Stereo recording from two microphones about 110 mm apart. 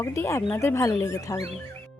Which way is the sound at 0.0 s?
25° left (ahead or behind).